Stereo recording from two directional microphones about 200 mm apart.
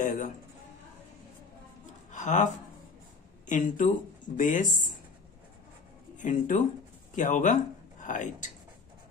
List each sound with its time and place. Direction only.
0.0 s speech: 40° left (ahead or behind)
2.1 s speech: 35° left (ahead or behind)
6.1 s speech: 40° left (ahead or behind)